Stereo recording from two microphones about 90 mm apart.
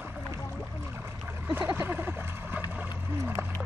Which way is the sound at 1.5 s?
25° right (ahead or behind).